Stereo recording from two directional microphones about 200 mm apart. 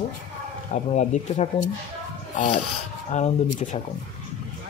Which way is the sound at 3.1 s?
35° left (ahead or behind).